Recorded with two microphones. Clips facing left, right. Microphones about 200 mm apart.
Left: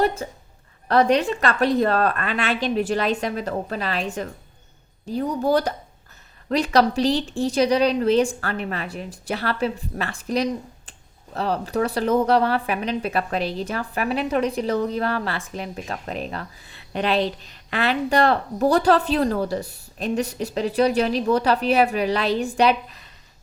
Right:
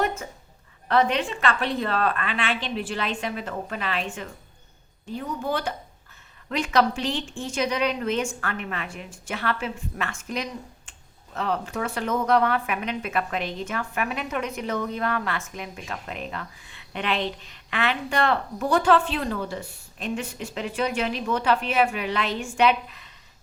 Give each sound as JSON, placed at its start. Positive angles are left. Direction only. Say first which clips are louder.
{"t": 0.0, "sound": "a woman's voice", "louder": "left 5 dB", "side_deg": 35}